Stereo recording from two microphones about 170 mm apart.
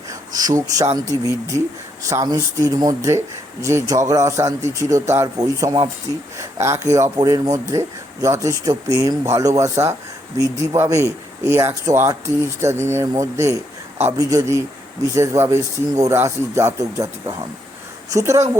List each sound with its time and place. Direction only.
0.3 s speech: 20° right (ahead or behind)